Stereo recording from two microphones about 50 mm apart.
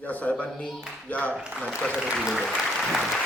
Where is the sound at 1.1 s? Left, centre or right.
Left.